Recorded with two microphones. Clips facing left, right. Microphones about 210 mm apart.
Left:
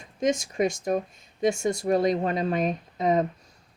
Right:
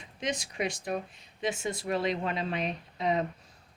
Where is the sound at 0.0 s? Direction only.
45° left (ahead or behind).